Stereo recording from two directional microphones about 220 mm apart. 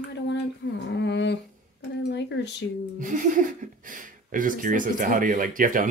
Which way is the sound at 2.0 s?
50° left (ahead or behind).